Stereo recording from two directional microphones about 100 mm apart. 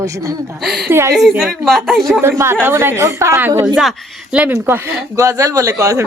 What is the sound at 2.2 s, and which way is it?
Speech, 25° right (ahead or behind).